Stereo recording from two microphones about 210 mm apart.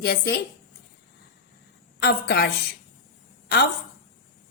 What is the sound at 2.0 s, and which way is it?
Speech, 50° left (ahead or behind).